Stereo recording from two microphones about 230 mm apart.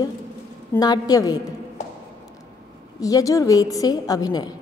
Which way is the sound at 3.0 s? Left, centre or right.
Centre.